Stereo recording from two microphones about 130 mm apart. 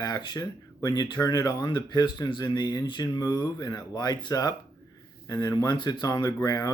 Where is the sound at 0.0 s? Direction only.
35° left (ahead or behind).